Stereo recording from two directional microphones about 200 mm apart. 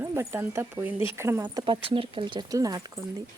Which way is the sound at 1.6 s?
25° right (ahead or behind).